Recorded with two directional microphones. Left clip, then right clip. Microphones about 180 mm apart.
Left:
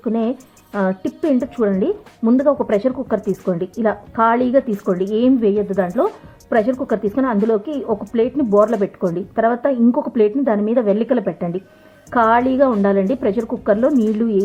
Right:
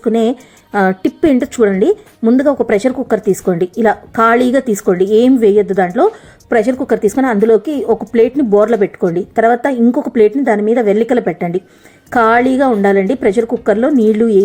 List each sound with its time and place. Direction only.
0.0 s speech: 25° right (ahead or behind)